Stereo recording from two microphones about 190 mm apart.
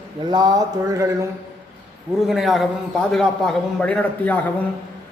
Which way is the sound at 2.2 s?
Centre (ahead or behind).